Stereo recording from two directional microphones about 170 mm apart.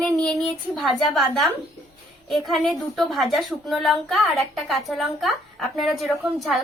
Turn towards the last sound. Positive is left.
turn(degrees=0)  # may be behind; listen again after turning